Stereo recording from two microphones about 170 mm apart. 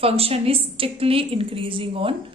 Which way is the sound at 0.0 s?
35° right (ahead or behind).